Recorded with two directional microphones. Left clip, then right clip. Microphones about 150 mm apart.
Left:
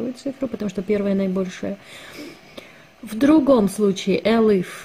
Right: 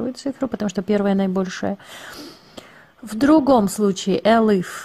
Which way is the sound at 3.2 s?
45° right (ahead or behind).